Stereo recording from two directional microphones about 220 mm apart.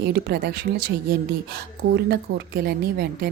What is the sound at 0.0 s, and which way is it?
Speech, 50° right (ahead or behind).